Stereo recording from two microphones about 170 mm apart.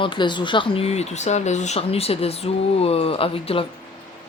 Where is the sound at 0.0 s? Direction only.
25° left (ahead or behind).